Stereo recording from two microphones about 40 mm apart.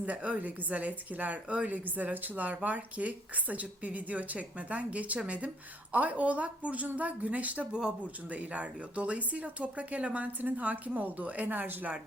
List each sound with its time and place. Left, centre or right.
0.0 s speech: right
7.7 s speech: centre
8.3 s speech: right